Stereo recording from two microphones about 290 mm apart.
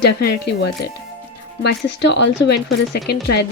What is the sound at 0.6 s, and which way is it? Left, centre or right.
Speech, left.